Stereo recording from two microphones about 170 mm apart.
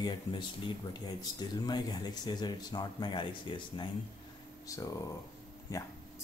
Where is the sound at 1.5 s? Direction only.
25° left (ahead or behind).